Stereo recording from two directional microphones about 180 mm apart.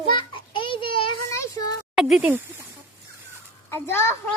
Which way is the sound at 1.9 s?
Centre (ahead or behind).